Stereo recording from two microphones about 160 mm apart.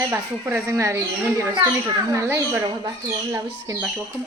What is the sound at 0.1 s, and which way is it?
A woman's voice, 15° right (ahead or behind).